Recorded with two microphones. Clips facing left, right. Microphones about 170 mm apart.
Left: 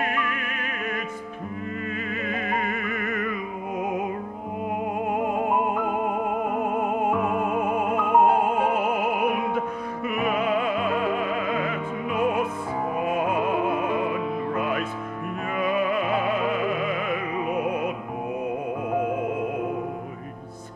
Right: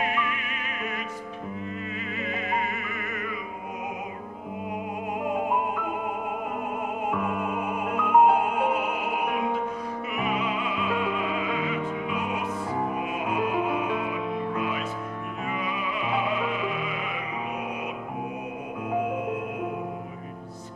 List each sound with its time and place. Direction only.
2.2 s music: 50° left (ahead or behind)
10.0 s music: 50° left (ahead or behind)
14.6 s music: 50° left (ahead or behind)